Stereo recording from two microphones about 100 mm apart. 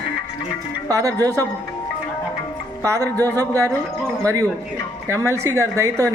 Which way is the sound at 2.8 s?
30° right (ahead or behind).